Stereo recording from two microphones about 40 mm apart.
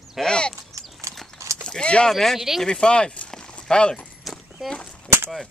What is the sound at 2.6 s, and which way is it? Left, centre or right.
Speech, left.